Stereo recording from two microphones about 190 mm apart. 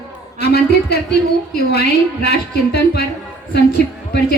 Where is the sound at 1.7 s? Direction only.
60° left (ahead or behind).